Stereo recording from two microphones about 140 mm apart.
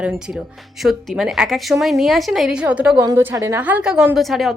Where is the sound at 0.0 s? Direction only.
5° right (ahead or behind).